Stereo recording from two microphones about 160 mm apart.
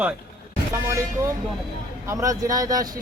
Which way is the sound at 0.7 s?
15° right (ahead or behind).